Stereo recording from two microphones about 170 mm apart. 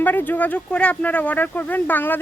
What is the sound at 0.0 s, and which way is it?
Speech, 10° left (ahead or behind).